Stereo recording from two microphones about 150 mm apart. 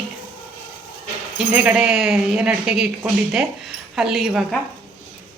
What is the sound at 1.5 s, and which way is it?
Speech, 10° right (ahead or behind).